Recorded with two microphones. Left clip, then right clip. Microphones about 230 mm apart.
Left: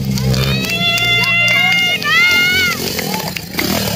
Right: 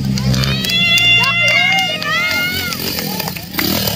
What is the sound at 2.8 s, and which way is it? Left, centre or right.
Music, left.